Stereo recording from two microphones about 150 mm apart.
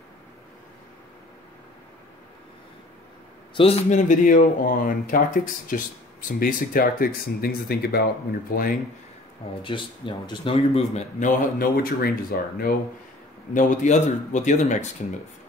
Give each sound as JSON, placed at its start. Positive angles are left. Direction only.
{"t": 3.6, "sound": "speech", "side_deg": 35}
{"t": 3.9, "sound": "speech", "side_deg": 55}
{"t": 6.4, "sound": "speech", "side_deg": 75}
{"t": 8.5, "sound": "speech", "side_deg": 70}
{"t": 9.6, "sound": "speech", "side_deg": 35}
{"t": 11.1, "sound": "speech", "side_deg": 65}
{"t": 13.5, "sound": "speech", "side_deg": 60}